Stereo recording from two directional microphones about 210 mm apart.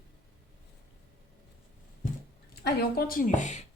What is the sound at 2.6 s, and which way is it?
A woman's voice, 45° left (ahead or behind).